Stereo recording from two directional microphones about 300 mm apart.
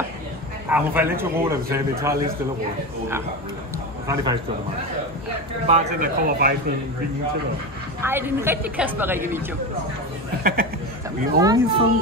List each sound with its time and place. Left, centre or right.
0.7 s a man's voice: centre
4.1 s a man's voice: centre
5.7 s speech: right
8.0 s a man's voice: centre
10.4 s speech: right
11.3 s a man's voice: centre